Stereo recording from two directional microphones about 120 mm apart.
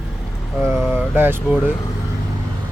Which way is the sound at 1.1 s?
15° right (ahead or behind).